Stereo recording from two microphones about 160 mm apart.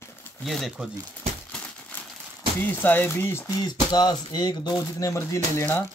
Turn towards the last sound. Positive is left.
turn(degrees=15)  # may be behind; listen again after turning